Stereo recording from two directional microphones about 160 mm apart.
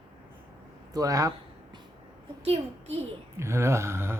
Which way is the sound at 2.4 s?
40° right (ahead or behind).